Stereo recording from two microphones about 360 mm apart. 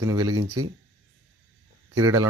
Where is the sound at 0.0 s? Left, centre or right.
Centre.